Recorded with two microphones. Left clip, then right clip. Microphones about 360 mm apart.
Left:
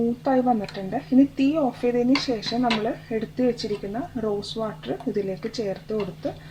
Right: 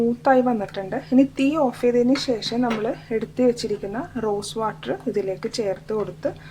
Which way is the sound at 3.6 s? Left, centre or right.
Right.